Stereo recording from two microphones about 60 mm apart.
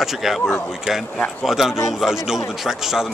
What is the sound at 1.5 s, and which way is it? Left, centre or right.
A man's voice, centre.